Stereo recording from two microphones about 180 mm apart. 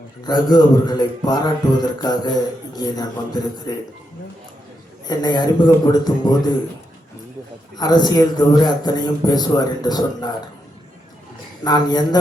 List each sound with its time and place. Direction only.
0.3 s a man's voice: 25° left (ahead or behind)
5.0 s a man's voice: 25° left (ahead or behind)
7.8 s a man's voice: 25° left (ahead or behind)
11.6 s a man's voice: 20° left (ahead or behind)